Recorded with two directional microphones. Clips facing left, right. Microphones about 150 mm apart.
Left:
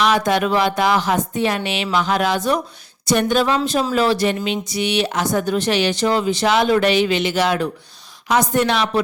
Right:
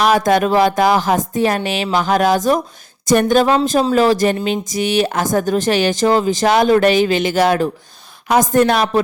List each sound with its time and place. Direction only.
0.0 s speech: 45° right (ahead or behind)